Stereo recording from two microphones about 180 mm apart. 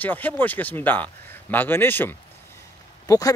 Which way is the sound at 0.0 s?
10° left (ahead or behind).